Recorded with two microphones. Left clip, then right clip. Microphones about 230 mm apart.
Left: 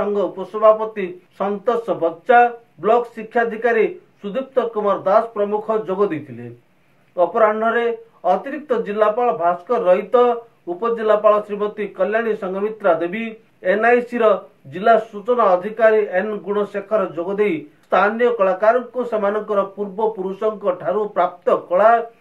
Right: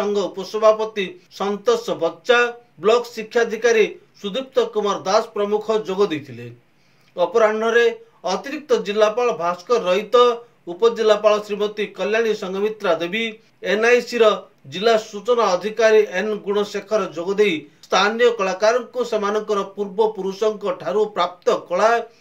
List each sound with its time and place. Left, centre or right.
0.5 s speech: right
7.2 s speech: right